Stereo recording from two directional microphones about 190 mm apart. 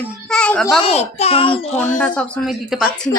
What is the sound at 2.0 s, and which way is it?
Speech, 5° left (ahead or behind).